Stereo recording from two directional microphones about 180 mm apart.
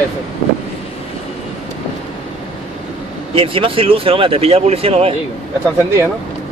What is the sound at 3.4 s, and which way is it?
Speech, 30° right (ahead or behind).